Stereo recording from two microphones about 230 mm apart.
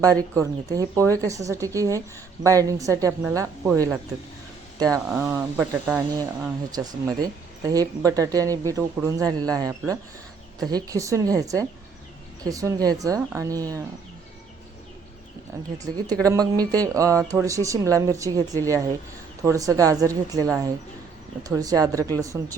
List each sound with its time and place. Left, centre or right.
0.3 s speech: centre
5.0 s speech: centre
16.2 s speech: centre